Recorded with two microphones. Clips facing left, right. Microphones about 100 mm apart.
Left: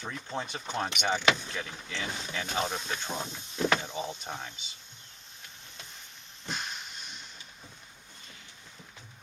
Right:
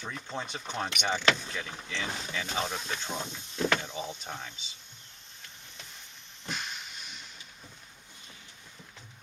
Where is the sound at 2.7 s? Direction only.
5° left (ahead or behind).